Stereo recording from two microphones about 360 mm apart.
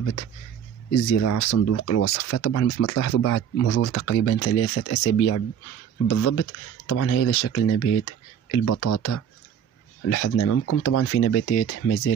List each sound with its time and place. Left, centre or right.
0.9 s speech: left
1.5 s speech: left
6.9 s speech: left